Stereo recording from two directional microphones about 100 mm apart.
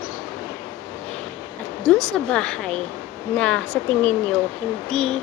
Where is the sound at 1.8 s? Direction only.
10° left (ahead or behind).